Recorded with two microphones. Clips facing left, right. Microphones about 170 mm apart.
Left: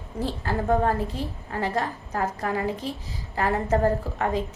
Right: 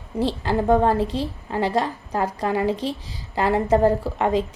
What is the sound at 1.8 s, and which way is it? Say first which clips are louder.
A woman's voice: right 3 dB; 20° right (ahead or behind).